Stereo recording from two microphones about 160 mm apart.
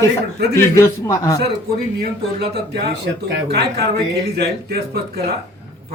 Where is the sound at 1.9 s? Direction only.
90° right.